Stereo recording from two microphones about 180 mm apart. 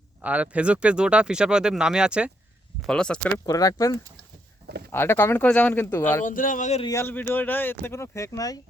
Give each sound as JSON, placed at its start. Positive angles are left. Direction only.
{"t": 0.2, "sound": "speech", "side_deg": -10}
{"t": 3.4, "sound": "speech", "side_deg": 20}
{"t": 6.2, "sound": "speech", "side_deg": 45}
{"t": 6.8, "sound": "speech", "side_deg": 15}